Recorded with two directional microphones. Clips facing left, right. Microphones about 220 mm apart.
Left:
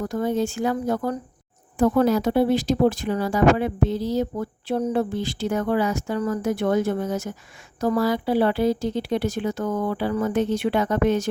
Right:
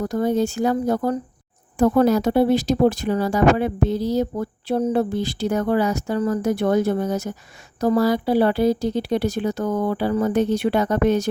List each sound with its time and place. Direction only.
0.0 s speech: 40° right (ahead or behind)